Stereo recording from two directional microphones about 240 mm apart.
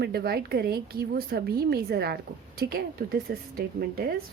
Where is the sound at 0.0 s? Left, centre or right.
Right.